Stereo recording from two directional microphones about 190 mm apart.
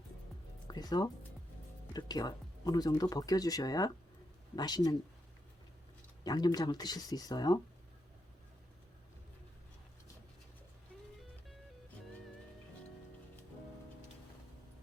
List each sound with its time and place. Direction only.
0.7 s speech: 20° left (ahead or behind)
6.2 s speech: 20° left (ahead or behind)